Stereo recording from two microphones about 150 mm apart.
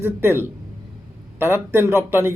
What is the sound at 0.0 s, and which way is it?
Speech, 15° right (ahead or behind).